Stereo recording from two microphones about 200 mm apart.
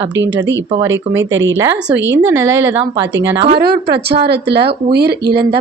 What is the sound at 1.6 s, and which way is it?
Speech, 15° right (ahead or behind).